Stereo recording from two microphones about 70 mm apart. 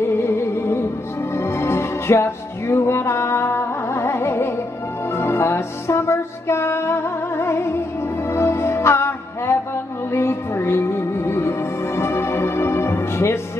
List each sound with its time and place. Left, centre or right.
0.0 s music: left